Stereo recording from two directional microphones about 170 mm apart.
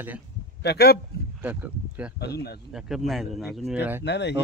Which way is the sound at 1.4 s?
10° right (ahead or behind).